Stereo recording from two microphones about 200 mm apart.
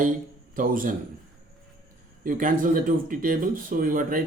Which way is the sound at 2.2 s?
45° right (ahead or behind).